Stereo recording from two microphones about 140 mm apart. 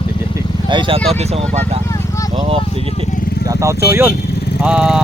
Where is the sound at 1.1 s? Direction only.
50° right (ahead or behind).